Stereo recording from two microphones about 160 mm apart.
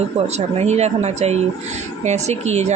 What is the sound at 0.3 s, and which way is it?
A woman's voice, 45° right (ahead or behind).